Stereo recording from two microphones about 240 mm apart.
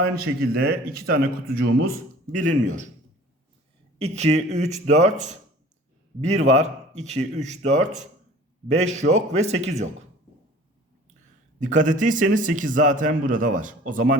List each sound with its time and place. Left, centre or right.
0.2 s speech: right
3.9 s speech: right
11.6 s speech: right